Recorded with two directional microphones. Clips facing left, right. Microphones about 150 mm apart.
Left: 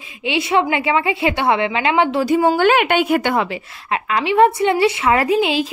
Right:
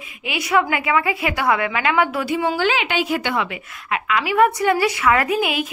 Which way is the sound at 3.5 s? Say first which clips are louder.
Left 3 dB; 30° left (ahead or behind).